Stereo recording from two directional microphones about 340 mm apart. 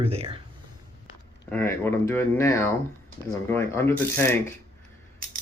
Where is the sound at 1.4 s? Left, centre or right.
Centre.